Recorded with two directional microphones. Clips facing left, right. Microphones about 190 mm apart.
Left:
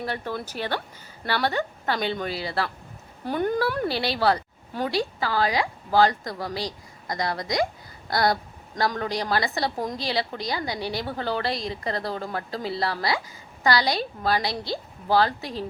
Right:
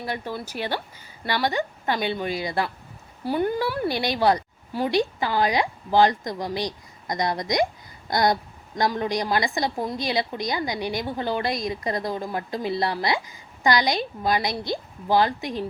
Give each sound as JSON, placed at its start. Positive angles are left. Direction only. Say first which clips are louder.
{"t": 0.0, "sound": "a woman's voice", "louder": "even", "side_deg": -15}